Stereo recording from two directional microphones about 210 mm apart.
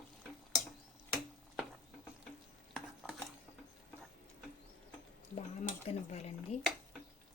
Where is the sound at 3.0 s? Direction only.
Centre (ahead or behind).